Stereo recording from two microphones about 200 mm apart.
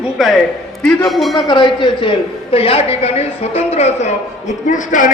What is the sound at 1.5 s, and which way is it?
A woman's voice, 25° left (ahead or behind).